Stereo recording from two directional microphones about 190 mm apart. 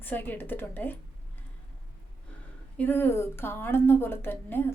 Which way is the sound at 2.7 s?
10° left (ahead or behind).